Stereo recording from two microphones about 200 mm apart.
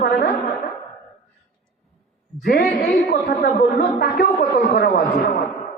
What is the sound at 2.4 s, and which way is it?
A woman's voice, 50° left (ahead or behind).